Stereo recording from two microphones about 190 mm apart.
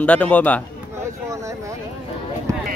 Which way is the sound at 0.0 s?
5° left (ahead or behind).